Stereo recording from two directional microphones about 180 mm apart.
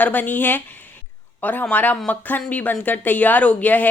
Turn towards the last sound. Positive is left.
turn(degrees=10)  # may be behind; listen again after turning